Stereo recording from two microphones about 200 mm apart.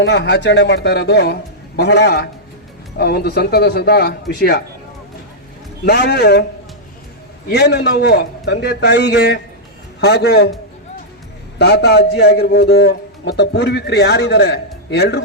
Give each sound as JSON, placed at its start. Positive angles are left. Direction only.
{"t": 0.0, "sound": "a man's voice", "side_deg": 60}
{"t": 5.8, "sound": "a man's voice", "side_deg": 55}
{"t": 7.5, "sound": "a man's voice", "side_deg": 55}
{"t": 11.6, "sound": "a man's voice", "side_deg": 55}